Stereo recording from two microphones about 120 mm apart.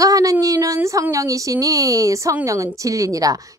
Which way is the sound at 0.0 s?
30° right (ahead or behind).